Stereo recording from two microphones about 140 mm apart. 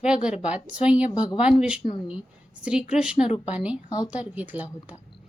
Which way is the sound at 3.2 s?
40° left (ahead or behind).